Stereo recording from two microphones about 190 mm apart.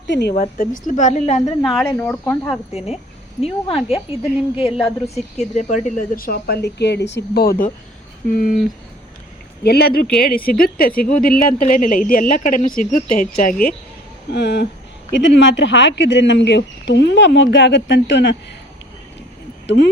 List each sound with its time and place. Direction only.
0.1 s speech: 60° left (ahead or behind)
0.5 s speech: 45° left (ahead or behind)
1.6 s speech: centre (ahead or behind)
2.7 s a woman's voice: 35° left (ahead or behind)
9.6 s speech: 55° left (ahead or behind)
14.3 s speech: 65° left (ahead or behind)
19.6 s speech: 65° left (ahead or behind)